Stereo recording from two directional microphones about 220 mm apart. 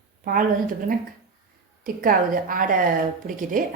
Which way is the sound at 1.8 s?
40° right (ahead or behind).